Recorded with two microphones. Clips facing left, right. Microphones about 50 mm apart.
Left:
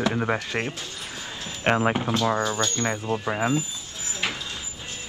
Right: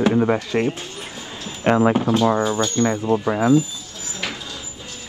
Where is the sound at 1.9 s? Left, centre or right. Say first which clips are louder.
Right 6 dB; right.